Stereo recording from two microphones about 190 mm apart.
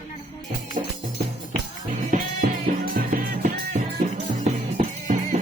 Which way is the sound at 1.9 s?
40° right (ahead or behind).